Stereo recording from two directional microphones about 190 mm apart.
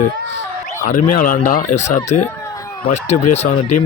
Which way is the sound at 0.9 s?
40° left (ahead or behind).